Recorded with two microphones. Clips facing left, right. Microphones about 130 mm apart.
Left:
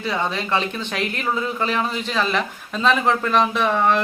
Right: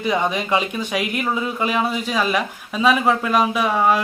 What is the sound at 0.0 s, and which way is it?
Speech, 15° right (ahead or behind).